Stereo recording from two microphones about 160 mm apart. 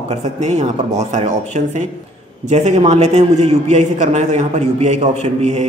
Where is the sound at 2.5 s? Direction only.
45° right (ahead or behind).